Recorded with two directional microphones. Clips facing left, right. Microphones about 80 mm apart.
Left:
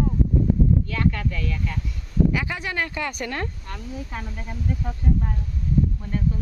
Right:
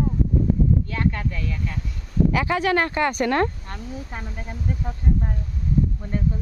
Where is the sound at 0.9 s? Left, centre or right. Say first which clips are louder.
Even; right.